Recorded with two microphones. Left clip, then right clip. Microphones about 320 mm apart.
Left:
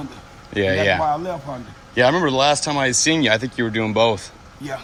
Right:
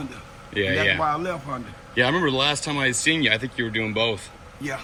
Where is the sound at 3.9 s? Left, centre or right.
Centre.